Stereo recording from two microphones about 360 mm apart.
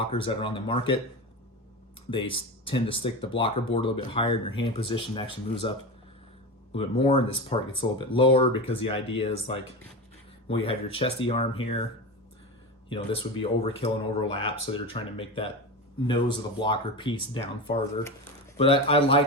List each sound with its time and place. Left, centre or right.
0.0 s speech: centre
2.0 s speech: centre
12.9 s speech: centre
18.5 s speech: centre